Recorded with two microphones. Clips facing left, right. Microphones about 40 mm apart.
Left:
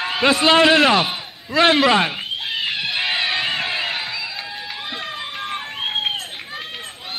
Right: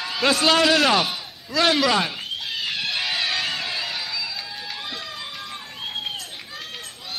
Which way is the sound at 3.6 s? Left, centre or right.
Left.